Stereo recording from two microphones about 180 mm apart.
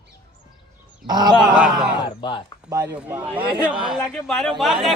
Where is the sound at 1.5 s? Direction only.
5° right (ahead or behind).